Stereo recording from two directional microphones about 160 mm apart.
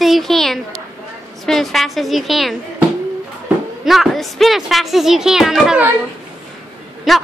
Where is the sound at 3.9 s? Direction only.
Centre (ahead or behind).